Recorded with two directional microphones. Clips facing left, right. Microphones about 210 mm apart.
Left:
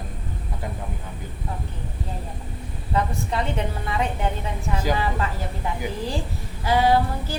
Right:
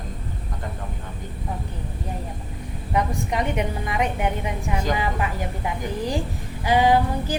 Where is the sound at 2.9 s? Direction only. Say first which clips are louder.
Right 1 dB; 15° right (ahead or behind).